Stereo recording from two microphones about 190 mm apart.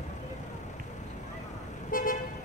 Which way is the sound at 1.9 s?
45° left (ahead or behind).